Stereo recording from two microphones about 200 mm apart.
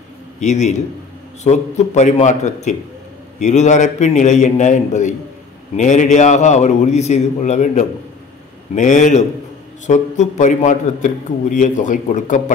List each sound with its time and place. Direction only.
0.4 s a man's voice: 35° left (ahead or behind)